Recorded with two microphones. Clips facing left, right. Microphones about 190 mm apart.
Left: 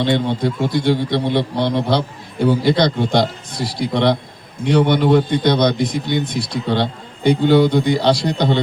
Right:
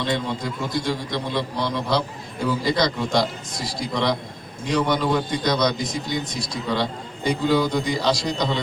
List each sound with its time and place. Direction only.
0.0 s a man's voice: 65° left (ahead or behind)